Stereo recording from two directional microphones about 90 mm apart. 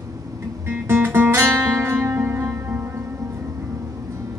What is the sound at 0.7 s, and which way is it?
Guitar, 25° right (ahead or behind).